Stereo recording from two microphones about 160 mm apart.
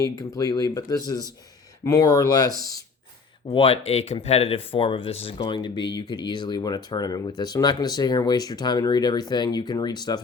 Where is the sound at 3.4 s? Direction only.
35° left (ahead or behind).